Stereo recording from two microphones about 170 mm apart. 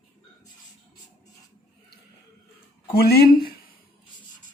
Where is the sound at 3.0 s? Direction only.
65° left (ahead or behind).